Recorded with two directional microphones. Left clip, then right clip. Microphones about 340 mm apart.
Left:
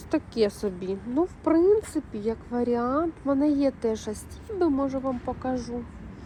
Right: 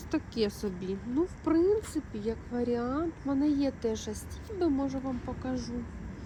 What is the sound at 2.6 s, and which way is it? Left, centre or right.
Speech, centre.